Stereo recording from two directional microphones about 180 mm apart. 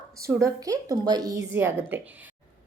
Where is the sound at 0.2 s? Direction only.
15° right (ahead or behind).